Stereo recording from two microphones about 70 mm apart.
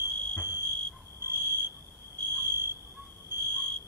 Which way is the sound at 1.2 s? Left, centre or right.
Right.